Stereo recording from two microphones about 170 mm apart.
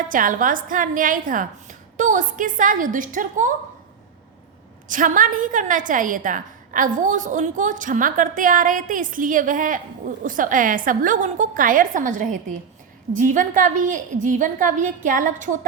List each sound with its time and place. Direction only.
0.0 s a woman's voice: 55° right (ahead or behind)
4.9 s a woman's voice: 50° right (ahead or behind)